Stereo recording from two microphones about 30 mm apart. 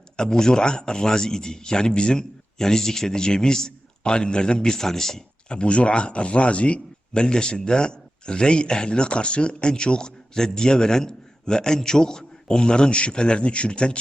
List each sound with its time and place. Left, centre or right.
0.2 s a man's voice: left
4.7 s speech: centre
5.5 s speech: left